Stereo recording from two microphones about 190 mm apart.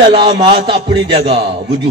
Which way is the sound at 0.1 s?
25° right (ahead or behind).